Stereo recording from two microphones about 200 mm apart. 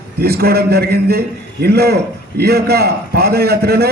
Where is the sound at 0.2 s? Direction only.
50° right (ahead or behind).